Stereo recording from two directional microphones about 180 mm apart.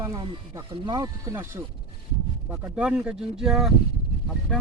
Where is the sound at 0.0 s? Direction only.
15° right (ahead or behind).